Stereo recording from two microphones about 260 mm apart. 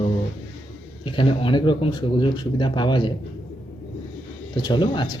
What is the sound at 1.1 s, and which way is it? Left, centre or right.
Speech, centre.